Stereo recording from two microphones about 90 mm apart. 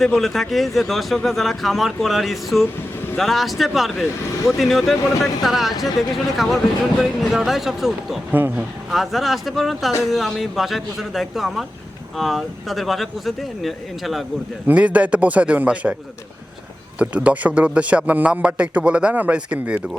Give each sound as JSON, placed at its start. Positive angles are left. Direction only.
{"t": 0.0, "sound": "speech", "side_deg": 0}
{"t": 8.3, "sound": "speech", "side_deg": -20}
{"t": 8.9, "sound": "speech", "side_deg": 0}
{"t": 14.7, "sound": "speech", "side_deg": -15}
{"t": 17.0, "sound": "speech", "side_deg": -15}